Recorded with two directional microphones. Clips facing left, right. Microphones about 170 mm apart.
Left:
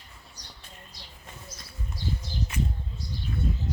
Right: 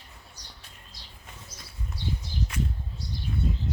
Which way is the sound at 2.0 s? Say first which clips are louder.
Even; 65° right (ahead or behind).